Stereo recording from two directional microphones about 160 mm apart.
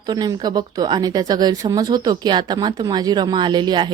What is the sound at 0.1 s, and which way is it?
Speech, 25° right (ahead or behind).